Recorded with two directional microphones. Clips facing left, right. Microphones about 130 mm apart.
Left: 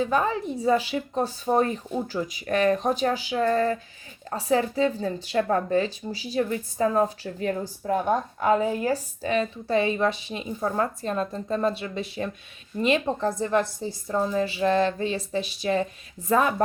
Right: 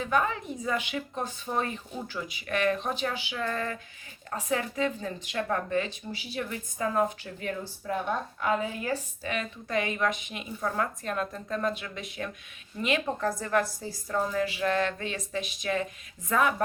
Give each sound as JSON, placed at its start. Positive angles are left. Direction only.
{"t": 0.0, "sound": "a woman's voice", "side_deg": 35}